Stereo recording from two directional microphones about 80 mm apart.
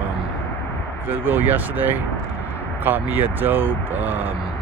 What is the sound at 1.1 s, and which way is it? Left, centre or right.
Speech, right.